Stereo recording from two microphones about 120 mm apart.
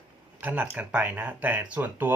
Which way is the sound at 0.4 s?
15° right (ahead or behind).